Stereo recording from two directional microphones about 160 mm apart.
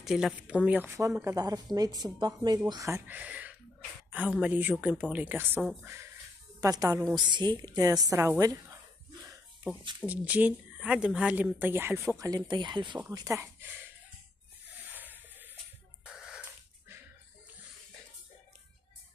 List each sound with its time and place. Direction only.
0.0 s a woman's voice: centre (ahead or behind)
6.6 s a woman's voice: 20° right (ahead or behind)
9.9 s a woman's voice: 10° right (ahead or behind)
14.9 s a sound: 10° right (ahead or behind)